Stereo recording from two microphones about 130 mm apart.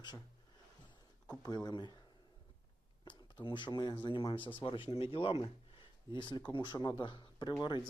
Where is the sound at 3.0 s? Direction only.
40° left (ahead or behind).